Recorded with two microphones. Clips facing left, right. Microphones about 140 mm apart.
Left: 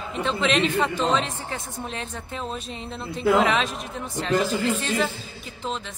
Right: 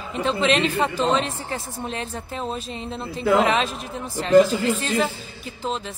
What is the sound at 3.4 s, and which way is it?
Speech, centre (ahead or behind).